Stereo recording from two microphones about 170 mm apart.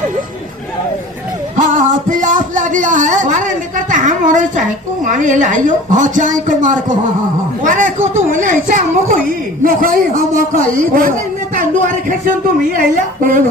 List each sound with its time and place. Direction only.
1.6 s a child's voice: 50° right (ahead or behind)